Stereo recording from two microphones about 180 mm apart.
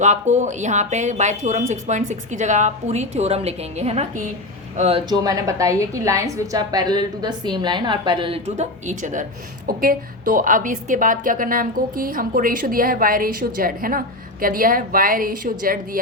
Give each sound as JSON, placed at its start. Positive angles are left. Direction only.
{"t": 0.0, "sound": "a woman's voice", "side_deg": -40}